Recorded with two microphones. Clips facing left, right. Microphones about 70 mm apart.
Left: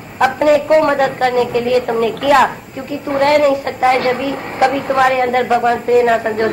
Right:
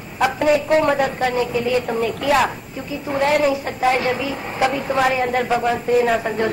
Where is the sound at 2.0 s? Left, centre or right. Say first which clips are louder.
Left 5 dB; left.